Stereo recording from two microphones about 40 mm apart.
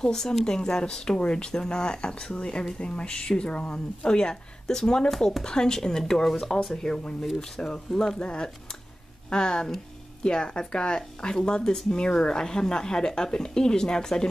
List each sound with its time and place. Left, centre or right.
0.0 s speech: centre
8.2 s speech: left